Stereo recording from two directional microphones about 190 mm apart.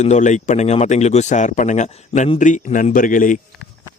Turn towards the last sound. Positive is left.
turn(degrees=45)  # may be behind; listen again after turning